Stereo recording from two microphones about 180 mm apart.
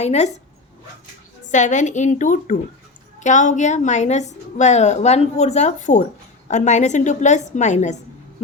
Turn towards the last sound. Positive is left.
turn(degrees=40)  # may be behind; listen again after turning